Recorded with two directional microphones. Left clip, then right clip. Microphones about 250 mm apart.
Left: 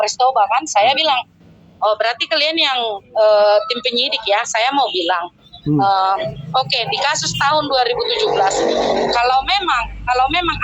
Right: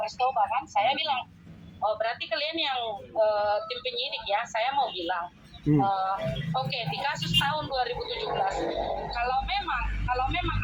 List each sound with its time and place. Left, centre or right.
0.0 s speech: left